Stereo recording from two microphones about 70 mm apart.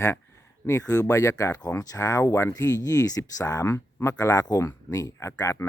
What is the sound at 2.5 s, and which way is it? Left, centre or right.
Speech, left.